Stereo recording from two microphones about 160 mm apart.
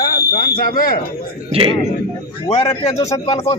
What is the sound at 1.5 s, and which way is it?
Speech, 35° right (ahead or behind).